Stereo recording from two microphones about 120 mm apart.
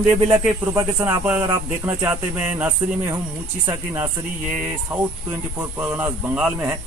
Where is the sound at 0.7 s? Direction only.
15° right (ahead or behind).